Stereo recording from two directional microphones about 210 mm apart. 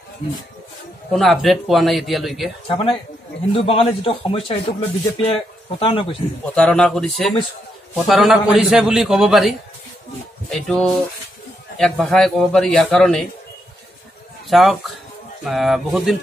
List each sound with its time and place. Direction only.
1.1 s a man's voice: centre (ahead or behind)
2.7 s a man's voice: 25° left (ahead or behind)
6.5 s a man's voice: 5° left (ahead or behind)
14.5 s a man's voice: centre (ahead or behind)